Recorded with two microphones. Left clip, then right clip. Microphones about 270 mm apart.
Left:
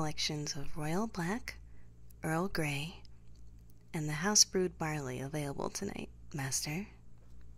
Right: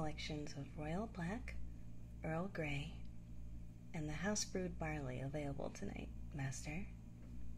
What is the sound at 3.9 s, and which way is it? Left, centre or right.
A woman's voice, left.